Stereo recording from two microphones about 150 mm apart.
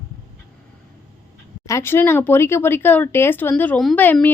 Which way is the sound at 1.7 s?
20° left (ahead or behind).